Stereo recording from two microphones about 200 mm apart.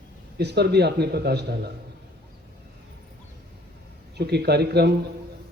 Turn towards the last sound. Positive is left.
turn(degrees=-55)  # may be behind; listen again after turning